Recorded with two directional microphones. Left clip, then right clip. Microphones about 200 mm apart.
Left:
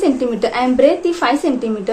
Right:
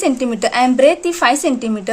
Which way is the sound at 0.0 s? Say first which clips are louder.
Left 1 dB; 35° right (ahead or behind).